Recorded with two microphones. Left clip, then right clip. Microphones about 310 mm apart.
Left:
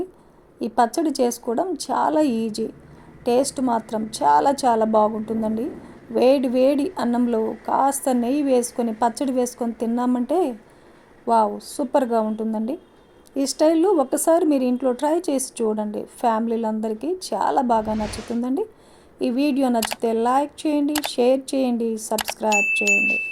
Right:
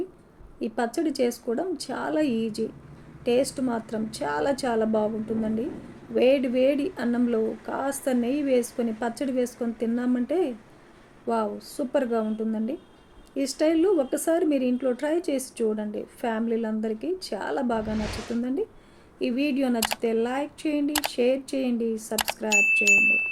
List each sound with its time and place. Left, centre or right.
0.6 s a woman's voice: left
17.8 s speech: centre
19.2 s a woman's voice: left
22.1 s speech: centre